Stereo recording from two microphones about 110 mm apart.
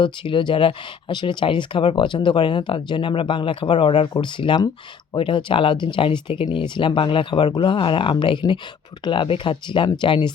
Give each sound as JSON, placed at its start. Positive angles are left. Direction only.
{"t": 0.0, "sound": "speech", "side_deg": 50}